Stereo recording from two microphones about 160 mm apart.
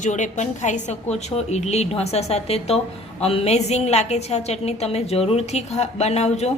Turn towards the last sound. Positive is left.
turn(degrees=40)  # may be behind; listen again after turning